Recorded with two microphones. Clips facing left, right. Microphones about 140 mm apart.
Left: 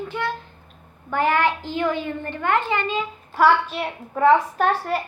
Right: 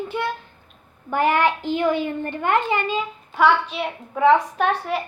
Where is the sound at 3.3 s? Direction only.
Centre (ahead or behind).